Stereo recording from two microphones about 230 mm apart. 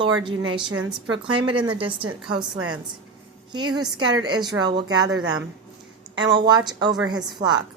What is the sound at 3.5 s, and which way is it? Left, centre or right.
Speech, centre.